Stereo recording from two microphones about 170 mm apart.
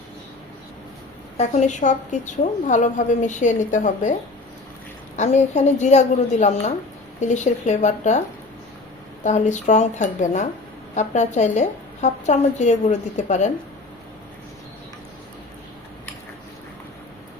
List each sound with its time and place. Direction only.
1.4 s a woman's voice: 45° left (ahead or behind)
5.1 s a woman's voice: 45° left (ahead or behind)
9.2 s a woman's voice: 45° left (ahead or behind)